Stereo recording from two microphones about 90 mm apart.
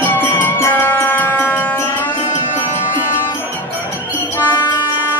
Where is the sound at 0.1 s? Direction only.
20° left (ahead or behind).